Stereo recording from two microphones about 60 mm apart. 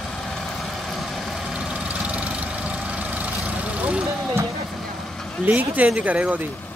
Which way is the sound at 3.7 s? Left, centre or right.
Right.